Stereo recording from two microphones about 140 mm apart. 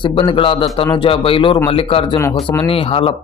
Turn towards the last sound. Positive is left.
turn(degrees=40)  # may be behind; listen again after turning